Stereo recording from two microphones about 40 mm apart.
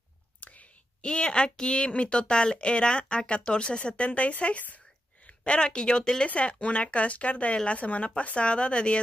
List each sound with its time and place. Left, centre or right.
0.4 s whispering: left
1.0 s speech: left
6.2 s speech: left